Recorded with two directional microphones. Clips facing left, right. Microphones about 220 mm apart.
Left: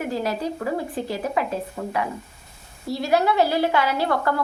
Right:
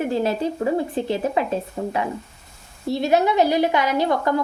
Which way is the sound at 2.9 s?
20° right (ahead or behind).